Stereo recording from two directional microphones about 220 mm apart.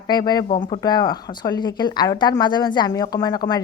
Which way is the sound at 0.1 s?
20° left (ahead or behind).